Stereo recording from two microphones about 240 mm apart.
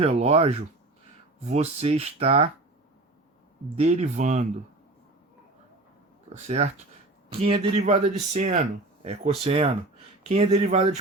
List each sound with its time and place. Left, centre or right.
0.0 s speech: right
3.8 s speech: right
6.3 s speech: right